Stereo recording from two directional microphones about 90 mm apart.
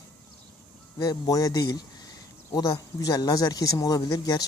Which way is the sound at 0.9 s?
40° left (ahead or behind).